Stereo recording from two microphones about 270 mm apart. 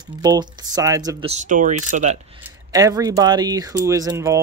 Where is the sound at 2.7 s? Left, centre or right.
Centre.